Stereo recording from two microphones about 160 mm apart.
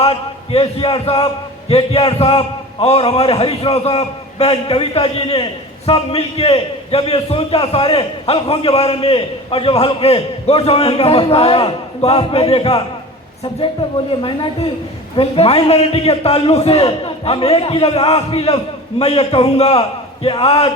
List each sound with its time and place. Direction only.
0.0 s a man's voice: 35° left (ahead or behind)
14.2 s a man's voice: 35° left (ahead or behind)